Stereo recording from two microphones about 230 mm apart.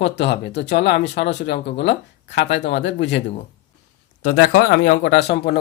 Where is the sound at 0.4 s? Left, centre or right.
Left.